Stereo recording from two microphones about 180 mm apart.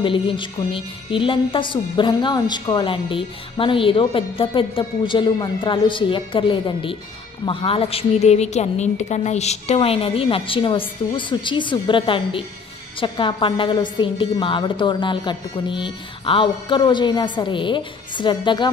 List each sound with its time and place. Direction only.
0.0 s a woman's voice: 30° left (ahead or behind)